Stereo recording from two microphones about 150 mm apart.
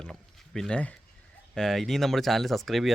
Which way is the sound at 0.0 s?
5° left (ahead or behind).